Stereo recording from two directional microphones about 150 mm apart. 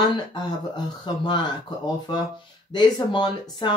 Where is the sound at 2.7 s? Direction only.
30° left (ahead or behind).